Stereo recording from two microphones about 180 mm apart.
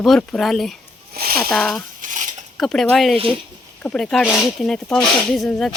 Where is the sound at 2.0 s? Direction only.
45° right (ahead or behind).